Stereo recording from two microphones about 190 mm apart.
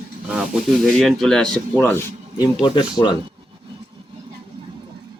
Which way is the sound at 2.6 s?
25° left (ahead or behind).